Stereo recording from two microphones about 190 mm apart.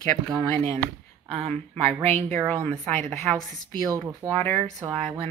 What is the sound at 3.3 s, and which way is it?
A woman's voice, 5° left (ahead or behind).